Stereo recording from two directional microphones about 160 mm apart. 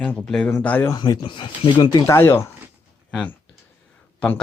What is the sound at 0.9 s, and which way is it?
Speech, 25° left (ahead or behind).